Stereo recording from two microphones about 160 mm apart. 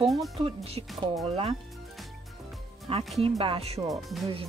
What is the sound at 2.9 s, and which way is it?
Speech, 35° right (ahead or behind).